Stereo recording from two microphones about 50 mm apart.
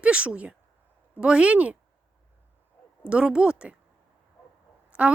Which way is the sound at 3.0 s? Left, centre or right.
Right.